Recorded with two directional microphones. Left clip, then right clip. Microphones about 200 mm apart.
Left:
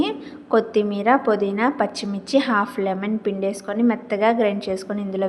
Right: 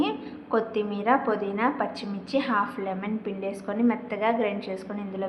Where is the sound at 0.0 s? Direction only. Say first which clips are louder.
Left 4 dB; 30° left (ahead or behind).